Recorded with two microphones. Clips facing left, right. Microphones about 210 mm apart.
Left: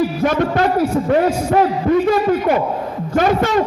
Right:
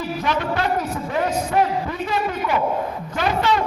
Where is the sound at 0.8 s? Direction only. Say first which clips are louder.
Left 9 dB; 10° left (ahead or behind).